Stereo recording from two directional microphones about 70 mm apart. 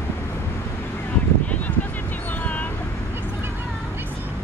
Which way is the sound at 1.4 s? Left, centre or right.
Left.